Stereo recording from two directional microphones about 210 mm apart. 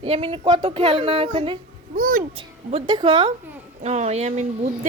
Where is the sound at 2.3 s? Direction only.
25° right (ahead or behind).